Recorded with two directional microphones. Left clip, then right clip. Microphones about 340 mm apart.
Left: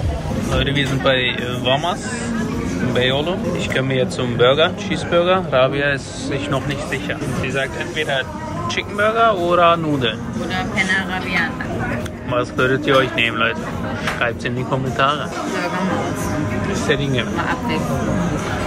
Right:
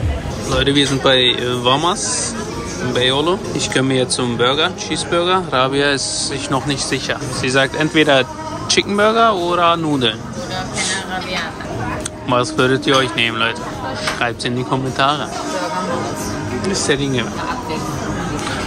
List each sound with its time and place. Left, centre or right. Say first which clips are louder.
0.6 s speech: right 6 dB; centre
7.4 s speech: right 8 dB; centre
12.3 s speech: right 3 dB; centre
16.8 s speech: right 1 dB; centre